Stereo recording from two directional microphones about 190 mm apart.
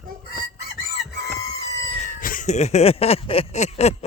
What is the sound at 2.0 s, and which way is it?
Cat, 45° left (ahead or behind).